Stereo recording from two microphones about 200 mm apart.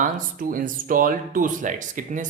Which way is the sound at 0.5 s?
45° right (ahead or behind).